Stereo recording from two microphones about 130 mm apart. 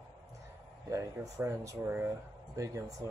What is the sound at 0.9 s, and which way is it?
Speech, 25° right (ahead or behind).